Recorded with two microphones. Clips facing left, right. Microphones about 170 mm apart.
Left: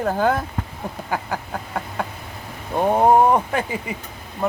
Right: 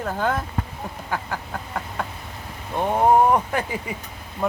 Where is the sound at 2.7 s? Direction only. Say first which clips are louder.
Left 4 dB; 35° left (ahead or behind).